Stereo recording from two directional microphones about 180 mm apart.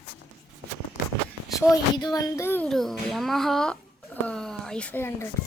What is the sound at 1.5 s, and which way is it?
Speech, 20° left (ahead or behind).